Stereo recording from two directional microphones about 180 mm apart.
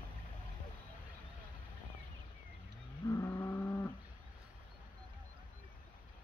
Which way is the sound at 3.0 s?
15° left (ahead or behind).